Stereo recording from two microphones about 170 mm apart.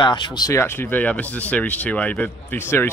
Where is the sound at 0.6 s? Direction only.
10° left (ahead or behind).